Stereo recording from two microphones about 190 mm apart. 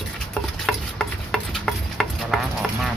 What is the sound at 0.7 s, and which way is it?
Stir, centre (ahead or behind).